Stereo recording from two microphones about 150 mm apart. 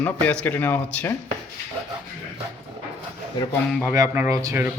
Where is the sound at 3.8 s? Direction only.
15° right (ahead or behind).